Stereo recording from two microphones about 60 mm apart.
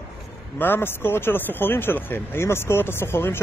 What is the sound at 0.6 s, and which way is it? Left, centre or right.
Speech, left.